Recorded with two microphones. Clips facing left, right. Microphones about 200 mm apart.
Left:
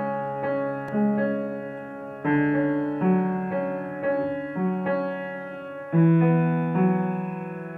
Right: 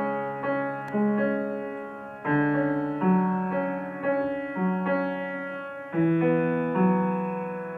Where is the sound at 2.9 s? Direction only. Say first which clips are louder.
Left 1 dB; 30° left (ahead or behind).